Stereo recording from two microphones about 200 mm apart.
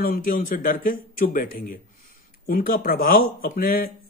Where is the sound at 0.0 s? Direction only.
45° left (ahead or behind).